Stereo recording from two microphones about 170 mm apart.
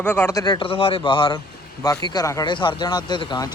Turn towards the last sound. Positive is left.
turn(degrees=25)  # may be behind; listen again after turning